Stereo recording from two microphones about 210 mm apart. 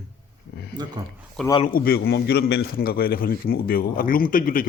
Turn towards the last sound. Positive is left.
turn(degrees=40)  # may be behind; listen again after turning